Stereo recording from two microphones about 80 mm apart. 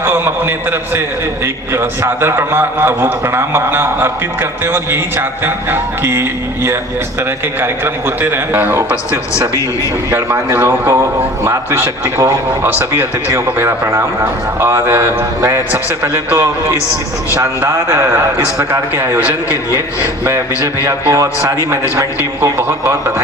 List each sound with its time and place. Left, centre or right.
0.0 s a man's voice: right
10.1 s a man's voice: right
21.7 s speech: right